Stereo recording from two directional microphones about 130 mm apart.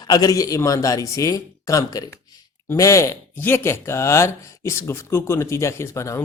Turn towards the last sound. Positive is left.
turn(degrees=20)  # may be behind; listen again after turning